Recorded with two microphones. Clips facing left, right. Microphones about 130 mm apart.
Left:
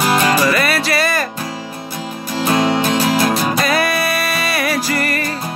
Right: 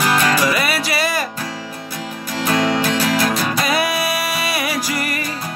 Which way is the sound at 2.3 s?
25° left (ahead or behind).